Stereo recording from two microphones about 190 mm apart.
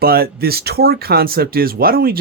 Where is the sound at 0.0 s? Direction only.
55° right (ahead or behind).